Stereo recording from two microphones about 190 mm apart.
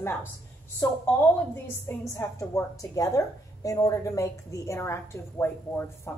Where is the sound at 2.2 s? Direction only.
15° left (ahead or behind).